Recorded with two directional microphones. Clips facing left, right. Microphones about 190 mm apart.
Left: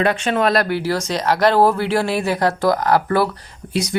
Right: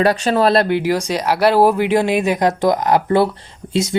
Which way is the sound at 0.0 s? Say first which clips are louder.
Right 3 dB; 40° right (ahead or behind).